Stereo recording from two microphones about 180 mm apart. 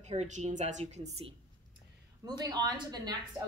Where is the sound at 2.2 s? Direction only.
20° right (ahead or behind).